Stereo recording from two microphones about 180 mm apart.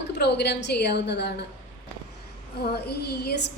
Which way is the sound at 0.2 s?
65° left (ahead or behind).